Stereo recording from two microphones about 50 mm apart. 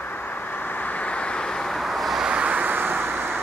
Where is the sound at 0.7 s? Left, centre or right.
Left; by 1.8 s centre.